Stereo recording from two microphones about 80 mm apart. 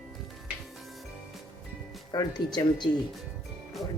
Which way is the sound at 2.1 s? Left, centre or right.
Left.